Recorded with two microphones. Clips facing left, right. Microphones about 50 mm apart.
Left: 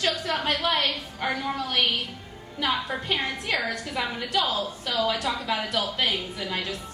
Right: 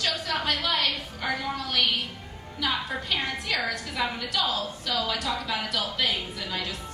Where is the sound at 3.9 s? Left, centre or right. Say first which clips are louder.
Left 2 dB; left.